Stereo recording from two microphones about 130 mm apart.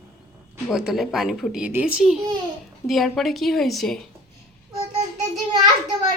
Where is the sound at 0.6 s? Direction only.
5° right (ahead or behind).